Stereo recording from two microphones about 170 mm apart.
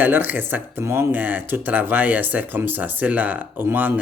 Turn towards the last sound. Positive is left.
turn(degrees=-10)  # may be behind; listen again after turning